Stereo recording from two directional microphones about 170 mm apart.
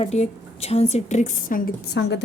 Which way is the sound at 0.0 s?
40° left (ahead or behind).